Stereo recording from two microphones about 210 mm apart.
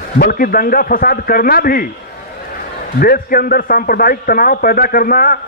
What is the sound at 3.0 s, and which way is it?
A man's voice, 45° left (ahead or behind).